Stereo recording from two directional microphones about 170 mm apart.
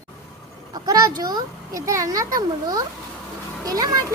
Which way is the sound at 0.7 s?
20° right (ahead or behind).